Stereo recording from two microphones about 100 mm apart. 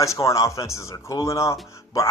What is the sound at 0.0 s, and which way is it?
Speech, 30° left (ahead or behind).